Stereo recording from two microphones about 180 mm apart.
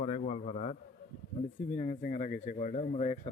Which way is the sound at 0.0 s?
35° left (ahead or behind).